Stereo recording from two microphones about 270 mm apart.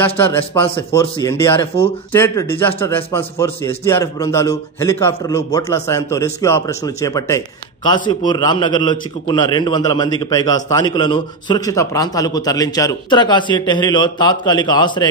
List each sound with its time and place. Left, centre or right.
0.0 s a man's voice: centre
0.7 s a man's voice: centre
2.1 s a man's voice: centre